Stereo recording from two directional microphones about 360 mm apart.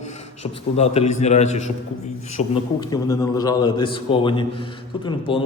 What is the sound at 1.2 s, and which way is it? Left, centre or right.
A man's voice, centre.